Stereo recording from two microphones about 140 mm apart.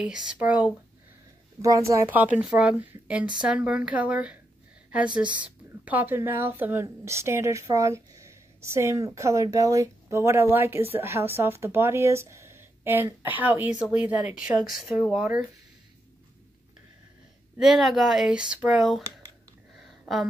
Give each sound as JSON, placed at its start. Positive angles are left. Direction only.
{"t": 0.0, "sound": "speech", "side_deg": -5}
{"t": 1.6, "sound": "speech", "side_deg": -20}
{"t": 17.6, "sound": "speech", "side_deg": 0}
{"t": 19.8, "sound": "a sound", "side_deg": 0}